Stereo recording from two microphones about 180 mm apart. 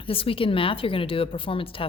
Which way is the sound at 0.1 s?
30° left (ahead or behind).